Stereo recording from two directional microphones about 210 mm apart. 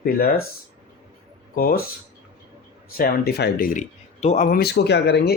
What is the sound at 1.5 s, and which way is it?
Speech, 45° left (ahead or behind).